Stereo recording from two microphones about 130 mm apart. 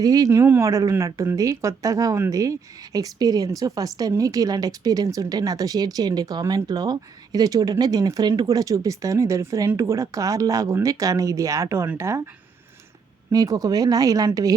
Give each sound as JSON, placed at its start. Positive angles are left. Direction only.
{"t": 0.0, "sound": "speech", "side_deg": -30}
{"t": 13.3, "sound": "speech", "side_deg": -30}